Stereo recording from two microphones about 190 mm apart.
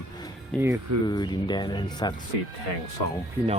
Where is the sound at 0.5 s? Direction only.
5° left (ahead or behind).